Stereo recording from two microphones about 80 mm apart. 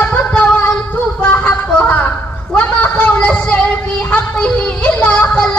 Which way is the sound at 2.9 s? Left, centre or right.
Left.